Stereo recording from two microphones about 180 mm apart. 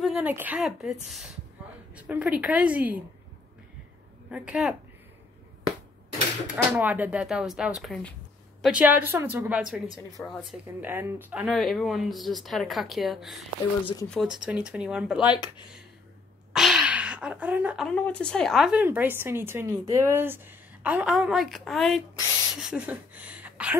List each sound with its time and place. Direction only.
0.0 s a woman's voice: 5° right (ahead or behind)
2.0 s a woman's voice: 10° right (ahead or behind)
4.3 s a woman's voice: 5° right (ahead or behind)
6.5 s a woman's voice: 10° right (ahead or behind)
10.2 s speech: 10° left (ahead or behind)
10.8 s a woman's voice: 10° right (ahead or behind)
15.2 s speech: 25° left (ahead or behind)
16.5 s a sound: 5° right (ahead or behind)
17.8 s a woman's voice: 5° left (ahead or behind)